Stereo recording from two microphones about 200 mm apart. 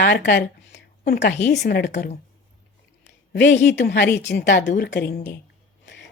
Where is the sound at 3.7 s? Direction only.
60° left (ahead or behind).